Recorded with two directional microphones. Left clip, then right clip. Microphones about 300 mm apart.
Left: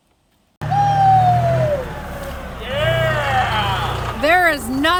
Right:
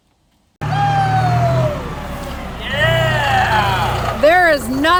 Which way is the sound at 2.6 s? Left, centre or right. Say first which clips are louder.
Right 3 dB; right.